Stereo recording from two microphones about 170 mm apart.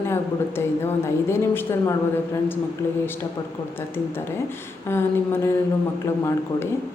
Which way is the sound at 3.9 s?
15° left (ahead or behind).